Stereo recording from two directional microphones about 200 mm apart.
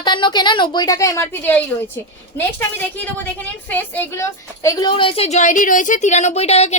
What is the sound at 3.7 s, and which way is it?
A woman's voice, 10° left (ahead or behind).